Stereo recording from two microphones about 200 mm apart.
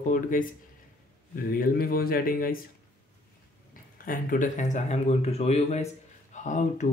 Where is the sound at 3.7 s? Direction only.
45° left (ahead or behind).